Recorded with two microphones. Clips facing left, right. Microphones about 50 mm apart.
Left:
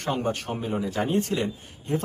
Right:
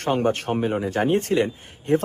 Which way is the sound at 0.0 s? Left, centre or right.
Right.